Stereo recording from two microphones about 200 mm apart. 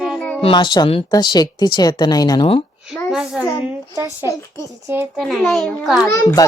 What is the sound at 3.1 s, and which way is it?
Speech, centre (ahead or behind).